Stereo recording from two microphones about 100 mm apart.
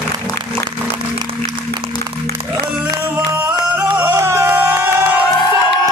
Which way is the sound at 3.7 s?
15° right (ahead or behind).